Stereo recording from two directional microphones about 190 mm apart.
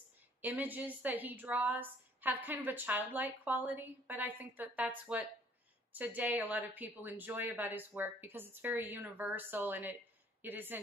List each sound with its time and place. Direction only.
0.4 s a woman's voice: 10° right (ahead or behind)